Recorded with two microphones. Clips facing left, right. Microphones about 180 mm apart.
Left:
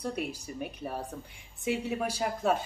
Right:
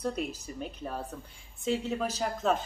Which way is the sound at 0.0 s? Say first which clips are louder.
Right 1 dB; 10° left (ahead or behind).